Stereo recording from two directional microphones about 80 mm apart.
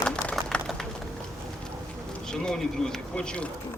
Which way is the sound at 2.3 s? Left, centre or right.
Centre.